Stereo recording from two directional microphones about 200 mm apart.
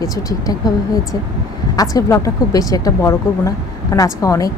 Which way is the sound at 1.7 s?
20° left (ahead or behind).